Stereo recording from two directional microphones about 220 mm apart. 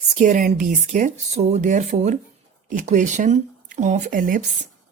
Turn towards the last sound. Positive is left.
turn(degrees=-40)  # may be behind; listen again after turning